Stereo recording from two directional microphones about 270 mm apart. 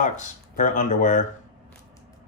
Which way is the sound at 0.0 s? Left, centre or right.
Left.